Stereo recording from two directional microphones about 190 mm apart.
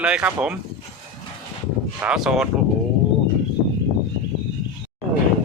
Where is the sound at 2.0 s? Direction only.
5° right (ahead or behind).